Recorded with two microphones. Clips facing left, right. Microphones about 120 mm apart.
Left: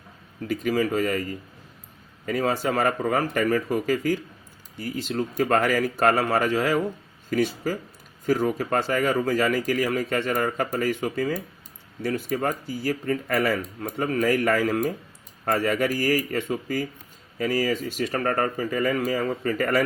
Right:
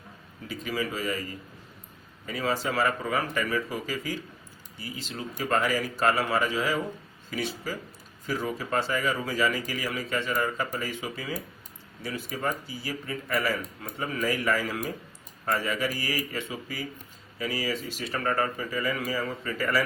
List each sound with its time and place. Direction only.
0.4 s speech: 55° left (ahead or behind)